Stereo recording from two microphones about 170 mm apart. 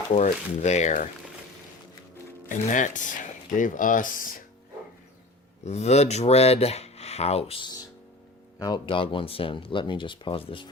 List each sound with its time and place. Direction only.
0.1 s speech: 45° left (ahead or behind)
2.5 s speech: 50° left (ahead or behind)
5.6 s speech: 40° left (ahead or behind)